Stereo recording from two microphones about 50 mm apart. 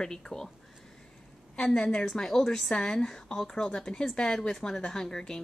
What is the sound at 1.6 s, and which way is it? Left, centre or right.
A woman's voice, centre.